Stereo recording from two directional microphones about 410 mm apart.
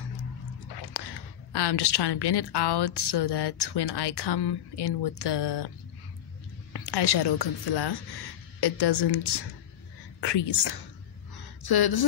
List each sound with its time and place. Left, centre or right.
0.7 s speech: left
6.7 s speech: left
11.3 s a sound: left